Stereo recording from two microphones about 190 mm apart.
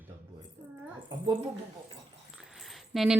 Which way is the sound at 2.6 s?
Centre (ahead or behind).